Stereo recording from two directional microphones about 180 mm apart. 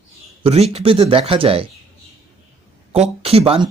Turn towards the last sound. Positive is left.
turn(degrees=-30)  # may be behind; listen again after turning